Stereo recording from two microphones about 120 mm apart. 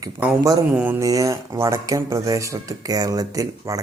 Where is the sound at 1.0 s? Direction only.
30° right (ahead or behind).